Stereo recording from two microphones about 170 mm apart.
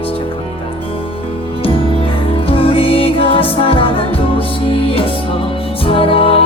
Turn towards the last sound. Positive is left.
turn(degrees=30)  # may be behind; listen again after turning